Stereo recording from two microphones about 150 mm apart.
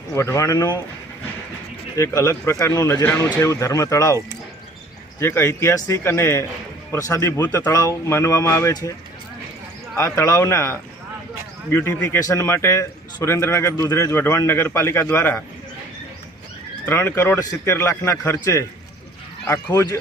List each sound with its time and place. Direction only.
0.1 s speech: 20° left (ahead or behind)
2.0 s a man's voice: 20° left (ahead or behind)
10.0 s a man's voice: 20° left (ahead or behind)
16.8 s a man's voice: 15° left (ahead or behind)
19.5 s a man's voice: 15° left (ahead or behind)